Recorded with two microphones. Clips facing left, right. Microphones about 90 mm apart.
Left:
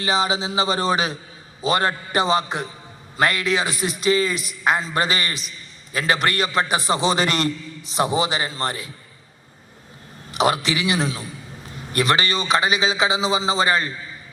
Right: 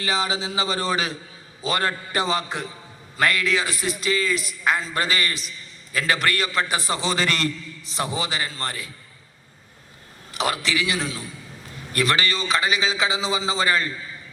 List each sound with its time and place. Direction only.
0.0 s a man's voice: 20° left (ahead or behind)
10.3 s a man's voice: 20° left (ahead or behind)